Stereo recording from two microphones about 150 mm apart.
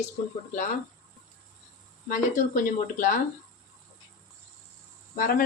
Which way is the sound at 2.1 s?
60° left (ahead or behind).